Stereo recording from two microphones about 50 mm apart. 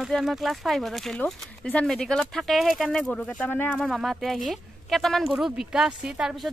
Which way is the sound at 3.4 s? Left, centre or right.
Left.